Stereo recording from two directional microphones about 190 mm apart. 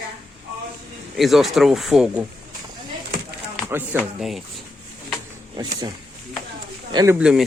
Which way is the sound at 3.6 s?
10° right (ahead or behind).